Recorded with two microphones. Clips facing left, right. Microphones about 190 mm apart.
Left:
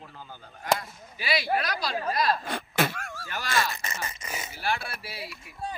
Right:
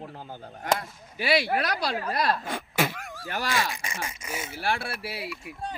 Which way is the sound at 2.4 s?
10° right (ahead or behind).